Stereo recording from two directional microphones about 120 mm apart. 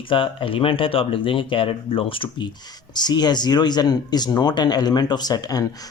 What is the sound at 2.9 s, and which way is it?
Speech, 35° left (ahead or behind).